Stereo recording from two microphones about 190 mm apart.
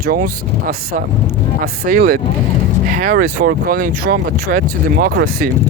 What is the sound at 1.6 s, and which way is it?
Speech, 50° right (ahead or behind).